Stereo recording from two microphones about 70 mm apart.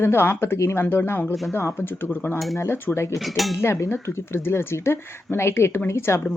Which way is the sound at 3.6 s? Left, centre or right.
Left.